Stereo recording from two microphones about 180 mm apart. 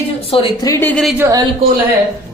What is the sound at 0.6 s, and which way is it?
Speech, 15° left (ahead or behind).